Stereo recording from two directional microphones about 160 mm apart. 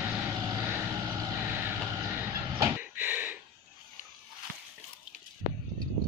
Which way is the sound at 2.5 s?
15° right (ahead or behind).